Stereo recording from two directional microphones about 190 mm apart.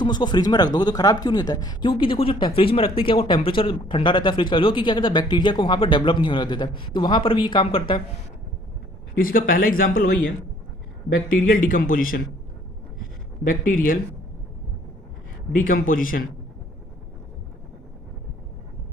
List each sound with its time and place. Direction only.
0.0 s speech: 25° left (ahead or behind)
9.1 s speech: 50° left (ahead or behind)
13.4 s speech: 45° left (ahead or behind)
15.5 s speech: 45° left (ahead or behind)